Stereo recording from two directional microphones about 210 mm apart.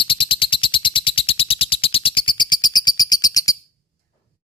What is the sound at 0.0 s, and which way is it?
Frog, 25° left (ahead or behind).